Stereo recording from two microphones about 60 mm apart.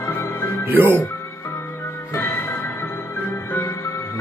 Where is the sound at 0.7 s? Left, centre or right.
Right.